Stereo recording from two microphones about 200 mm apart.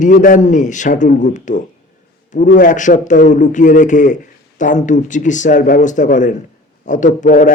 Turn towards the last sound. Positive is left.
turn(degrees=40)  # may be behind; listen again after turning